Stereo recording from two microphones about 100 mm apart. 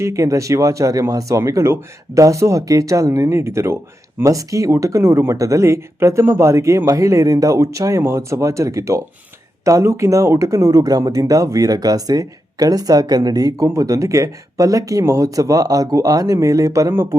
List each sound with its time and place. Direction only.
0.0 s speech: 30° right (ahead or behind)